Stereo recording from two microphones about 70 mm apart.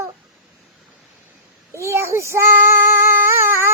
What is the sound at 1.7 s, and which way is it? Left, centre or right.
Child singing, right.